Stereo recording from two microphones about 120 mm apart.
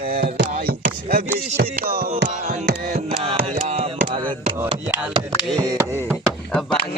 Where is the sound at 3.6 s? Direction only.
65° right (ahead or behind).